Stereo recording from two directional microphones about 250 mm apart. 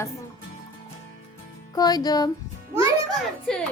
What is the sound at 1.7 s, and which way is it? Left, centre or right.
Speech, centre.